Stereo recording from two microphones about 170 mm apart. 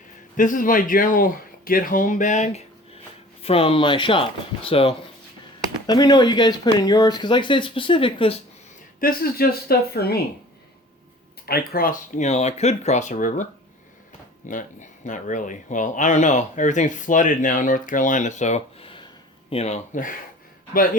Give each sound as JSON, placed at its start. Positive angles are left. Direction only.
{"t": 0.3, "sound": "speech", "side_deg": 50}
{"t": 9.0, "sound": "speech", "side_deg": 60}
{"t": 11.4, "sound": "speech", "side_deg": 60}